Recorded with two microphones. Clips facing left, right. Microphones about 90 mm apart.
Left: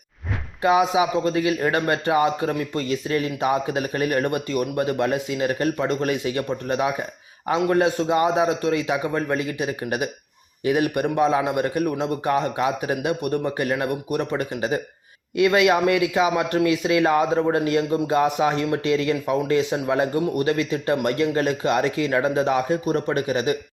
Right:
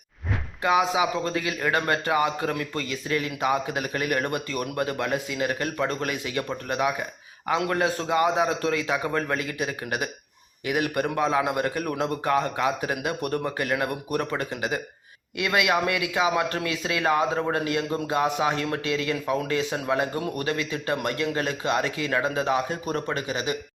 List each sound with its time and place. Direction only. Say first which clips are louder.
0.6 s a man's voice: left 4 dB; 25° left (ahead or behind)
23.1 s speech: left 6 dB; 25° right (ahead or behind)